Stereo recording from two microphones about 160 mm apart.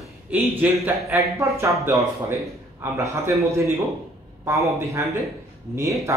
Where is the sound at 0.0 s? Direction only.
5° right (ahead or behind).